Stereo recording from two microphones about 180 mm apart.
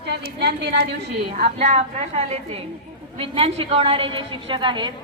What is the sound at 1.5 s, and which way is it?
A woman's voice, 40° right (ahead or behind).